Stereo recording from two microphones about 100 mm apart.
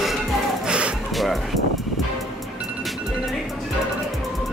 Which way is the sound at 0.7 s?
10° right (ahead or behind).